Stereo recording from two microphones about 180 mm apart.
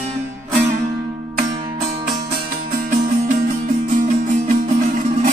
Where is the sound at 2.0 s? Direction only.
50° right (ahead or behind).